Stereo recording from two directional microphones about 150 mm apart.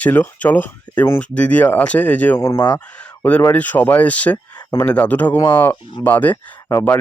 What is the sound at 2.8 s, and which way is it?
Speech, 10° left (ahead or behind).